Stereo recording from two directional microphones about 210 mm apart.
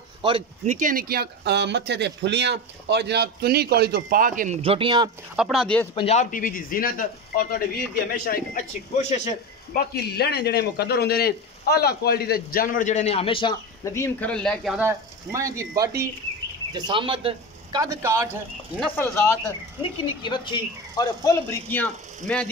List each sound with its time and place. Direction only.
0.2 s speech: 25° right (ahead or behind)
0.7 s speech: 40° right (ahead or behind)
4.6 s speech: 25° right (ahead or behind)
5.3 s speech: centre (ahead or behind)
5.9 s a man's voice: 30° left (ahead or behind)
9.8 s a man's voice: 50° left (ahead or behind); by 17.8 s 25° right (ahead or behind)
18.0 s speech: 15° right (ahead or behind)
18.8 s speech: 10° left (ahead or behind)
20.2 s speech: 20° left (ahead or behind)